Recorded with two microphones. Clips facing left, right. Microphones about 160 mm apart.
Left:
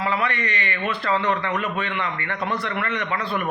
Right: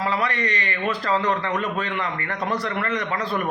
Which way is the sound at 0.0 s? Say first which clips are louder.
Even; 35° right (ahead or behind).